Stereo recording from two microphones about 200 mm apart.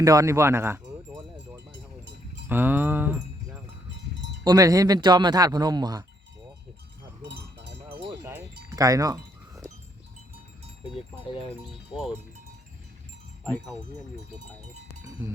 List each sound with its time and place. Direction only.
0.0 s speech: 15° right (ahead or behind)
2.5 s speech: 10° right (ahead or behind)
4.4 s speech: 15° right (ahead or behind)
7.2 s a sound: 65° right (ahead or behind)
8.7 s wind chime: 15° right (ahead or behind)
11.3 s speech: 30° left (ahead or behind)
13.4 s speech: 5° left (ahead or behind)